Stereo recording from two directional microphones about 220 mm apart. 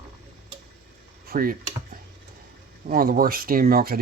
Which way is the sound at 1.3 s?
40° right (ahead or behind).